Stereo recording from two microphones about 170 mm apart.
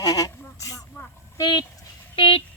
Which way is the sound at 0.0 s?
20° left (ahead or behind).